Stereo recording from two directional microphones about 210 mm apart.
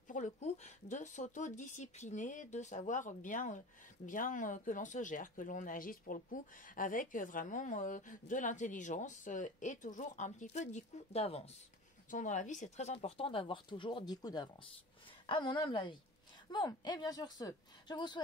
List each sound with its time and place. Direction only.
0.1 s speech: 35° left (ahead or behind)